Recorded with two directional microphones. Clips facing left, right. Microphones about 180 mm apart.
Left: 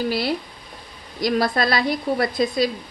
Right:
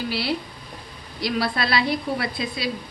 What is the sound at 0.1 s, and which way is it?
A woman's voice, 45° left (ahead or behind).